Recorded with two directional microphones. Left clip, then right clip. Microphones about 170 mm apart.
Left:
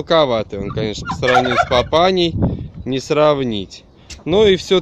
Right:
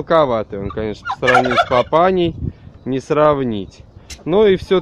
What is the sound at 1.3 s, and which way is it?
Turkey, 35° right (ahead or behind).